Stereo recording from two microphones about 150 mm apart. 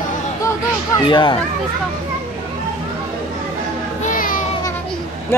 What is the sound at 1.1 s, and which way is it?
Speech, 30° left (ahead or behind).